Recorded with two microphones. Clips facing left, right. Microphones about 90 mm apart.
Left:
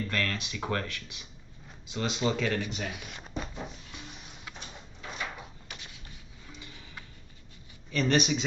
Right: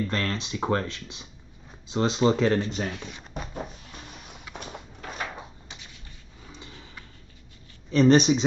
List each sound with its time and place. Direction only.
0.0 s speech: 30° right (ahead or behind)
4.6 s sliding door: 45° right (ahead or behind)
7.9 s speech: 30° right (ahead or behind)